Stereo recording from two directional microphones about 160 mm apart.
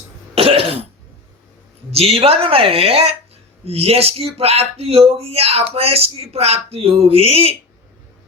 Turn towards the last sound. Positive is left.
turn(degrees=-40)  # may be behind; listen again after turning